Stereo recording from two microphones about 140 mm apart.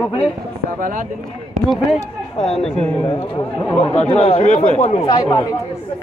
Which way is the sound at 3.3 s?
30° left (ahead or behind).